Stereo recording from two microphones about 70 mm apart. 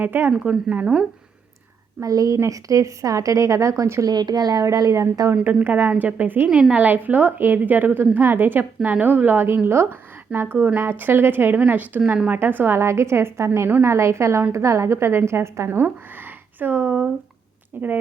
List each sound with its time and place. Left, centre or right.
0.0 s a woman's voice: right
2.0 s a woman's voice: right
4.0 s speech: right
4.6 s a woman's voice: right
4.9 s a woman's voice: right
5.3 s a woman's voice: right
6.5 s a woman's voice: centre